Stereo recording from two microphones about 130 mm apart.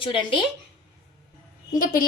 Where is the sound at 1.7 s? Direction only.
90° left.